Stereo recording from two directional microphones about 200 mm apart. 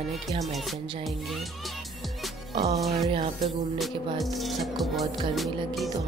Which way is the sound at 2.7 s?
Centre (ahead or behind).